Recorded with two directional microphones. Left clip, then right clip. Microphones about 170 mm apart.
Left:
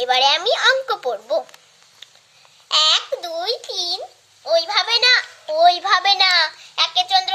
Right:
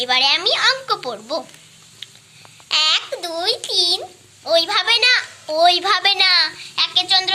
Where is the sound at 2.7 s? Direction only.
25° left (ahead or behind).